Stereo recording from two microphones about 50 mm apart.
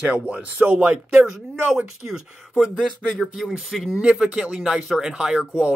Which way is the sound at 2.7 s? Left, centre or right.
Centre.